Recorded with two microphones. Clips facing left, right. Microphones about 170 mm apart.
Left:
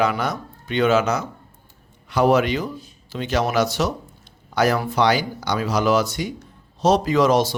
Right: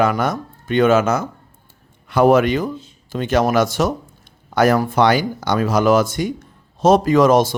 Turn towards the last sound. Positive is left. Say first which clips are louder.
# right 4 dB
turn(degrees=-50)  # may be behind; listen again after turning